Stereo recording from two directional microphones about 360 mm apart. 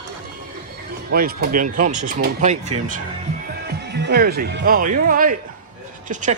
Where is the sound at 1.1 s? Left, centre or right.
Right.